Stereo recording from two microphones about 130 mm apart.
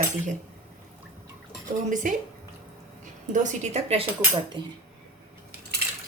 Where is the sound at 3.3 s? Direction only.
60° right (ahead or behind).